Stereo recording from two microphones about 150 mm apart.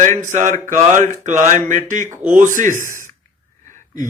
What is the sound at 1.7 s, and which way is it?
Speech, 55° right (ahead or behind).